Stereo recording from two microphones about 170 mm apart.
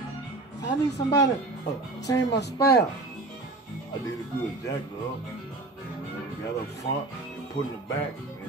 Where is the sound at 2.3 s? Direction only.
80° left.